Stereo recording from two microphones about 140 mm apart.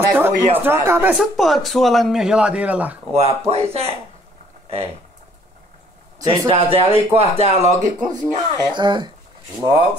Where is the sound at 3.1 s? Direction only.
50° right (ahead or behind).